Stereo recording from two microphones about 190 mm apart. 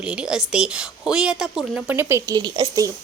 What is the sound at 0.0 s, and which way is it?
A woman's voice, 5° right (ahead or behind).